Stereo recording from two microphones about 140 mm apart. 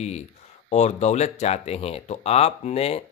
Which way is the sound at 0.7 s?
55° left (ahead or behind).